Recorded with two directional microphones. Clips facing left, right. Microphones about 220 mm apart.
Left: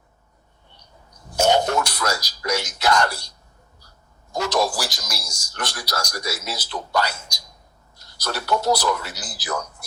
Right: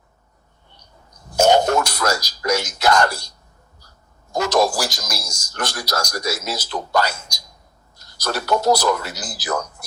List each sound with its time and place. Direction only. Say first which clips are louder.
1.4 s speech: right 4 dB; 45° right (ahead or behind)
4.3 s a man's voice: right 4 dB; 45° right (ahead or behind)